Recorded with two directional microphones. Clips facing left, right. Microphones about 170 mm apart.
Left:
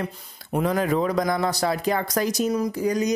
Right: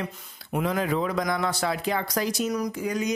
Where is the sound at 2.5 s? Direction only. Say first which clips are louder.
Left 4 dB; 30° left (ahead or behind).